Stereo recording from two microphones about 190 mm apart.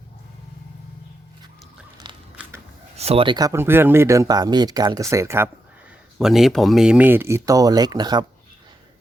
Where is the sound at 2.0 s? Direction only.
25° right (ahead or behind).